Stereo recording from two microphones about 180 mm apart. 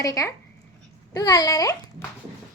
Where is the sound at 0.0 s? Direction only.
20° left (ahead or behind).